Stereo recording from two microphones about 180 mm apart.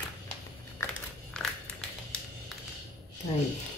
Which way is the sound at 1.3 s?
5° left (ahead or behind).